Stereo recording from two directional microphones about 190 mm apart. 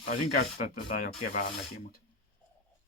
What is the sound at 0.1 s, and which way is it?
Speech, 50° left (ahead or behind).